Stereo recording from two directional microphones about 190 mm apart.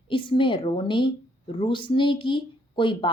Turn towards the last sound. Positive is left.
turn(degrees=25)  # may be behind; listen again after turning